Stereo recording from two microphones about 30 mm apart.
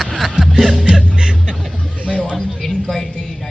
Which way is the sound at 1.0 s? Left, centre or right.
Right.